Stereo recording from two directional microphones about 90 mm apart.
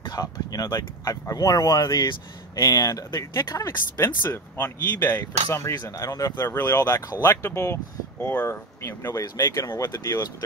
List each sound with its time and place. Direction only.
0.0 s speech: 50° left (ahead or behind); by 5.1 s 25° left (ahead or behind)
5.1 s speech: 40° left (ahead or behind)
6.3 s speech: 25° left (ahead or behind)